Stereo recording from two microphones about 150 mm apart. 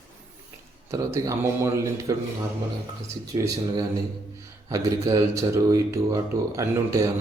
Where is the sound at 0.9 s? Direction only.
20° right (ahead or behind).